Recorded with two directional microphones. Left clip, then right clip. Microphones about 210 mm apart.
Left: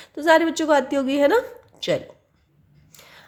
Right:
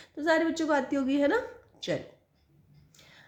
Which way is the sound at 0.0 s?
25° left (ahead or behind).